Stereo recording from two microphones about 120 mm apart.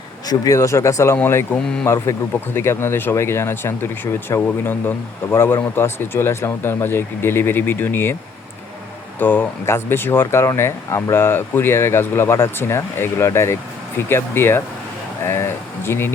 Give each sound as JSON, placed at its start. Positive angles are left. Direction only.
{"t": 0.3, "sound": "speech", "side_deg": 25}
{"t": 9.1, "sound": "speech", "side_deg": 15}